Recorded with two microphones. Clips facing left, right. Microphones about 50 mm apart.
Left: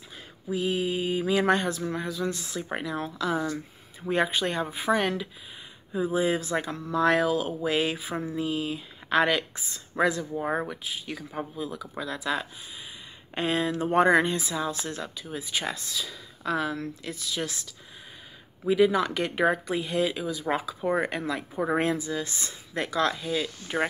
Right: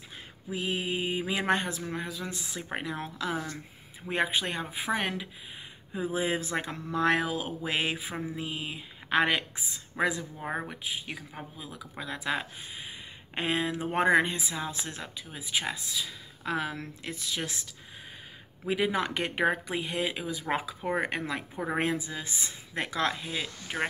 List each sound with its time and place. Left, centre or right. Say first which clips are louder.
0.5 s speech: left 4 dB; right
6.1 s speech: left 4 dB; right
10.4 s speech: left 5 dB; centre
10.7 s speech: left 2 dB; right
12.0 s speech: left 2 dB; right
15.2 s speech: left 1 dB; centre
16.4 s speech: left 4 dB; right
18.7 s speech: left 6 dB; right